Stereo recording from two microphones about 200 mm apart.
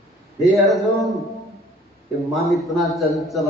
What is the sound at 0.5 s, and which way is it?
Speech, centre (ahead or behind).